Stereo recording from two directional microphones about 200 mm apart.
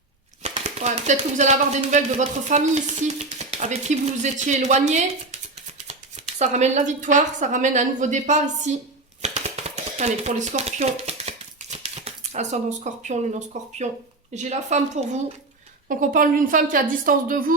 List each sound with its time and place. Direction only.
0.4 s speech: 35° right (ahead or behind)
9.2 s typewriter: 35° right (ahead or behind)
14.3 s a woman's voice: 35° right (ahead or behind)